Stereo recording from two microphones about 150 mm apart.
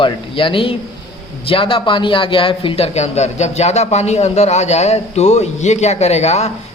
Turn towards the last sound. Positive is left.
turn(degrees=45)  # may be behind; listen again after turning